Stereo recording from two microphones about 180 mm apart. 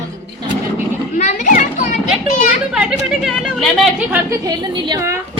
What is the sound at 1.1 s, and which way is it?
Speech, 40° left (ahead or behind).